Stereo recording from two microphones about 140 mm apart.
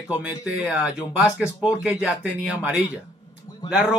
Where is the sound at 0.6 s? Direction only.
5° right (ahead or behind).